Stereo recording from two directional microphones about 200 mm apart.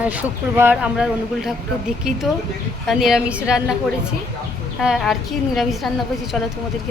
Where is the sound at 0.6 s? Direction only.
5° right (ahead or behind).